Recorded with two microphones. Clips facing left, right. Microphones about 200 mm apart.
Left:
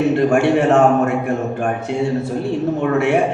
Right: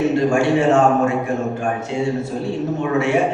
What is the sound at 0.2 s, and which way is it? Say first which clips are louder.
Speech: left 2 dB; 60° left (ahead or behind).